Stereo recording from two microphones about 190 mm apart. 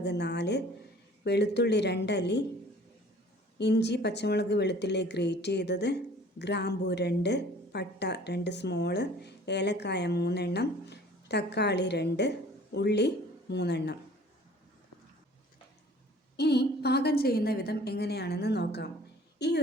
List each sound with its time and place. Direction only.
0.0 s a woman's voice: 60° left (ahead or behind)
3.6 s a woman's voice: 60° left (ahead or behind)
16.4 s a woman's voice: 60° left (ahead or behind)